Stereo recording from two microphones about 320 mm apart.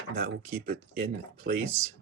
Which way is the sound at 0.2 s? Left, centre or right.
Right.